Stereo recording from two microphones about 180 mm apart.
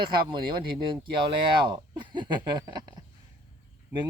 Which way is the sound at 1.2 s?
25° right (ahead or behind).